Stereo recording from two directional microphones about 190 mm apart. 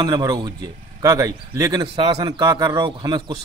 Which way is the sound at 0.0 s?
15° right (ahead or behind).